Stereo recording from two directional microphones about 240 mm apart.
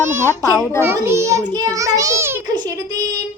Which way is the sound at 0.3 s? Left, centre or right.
Centre.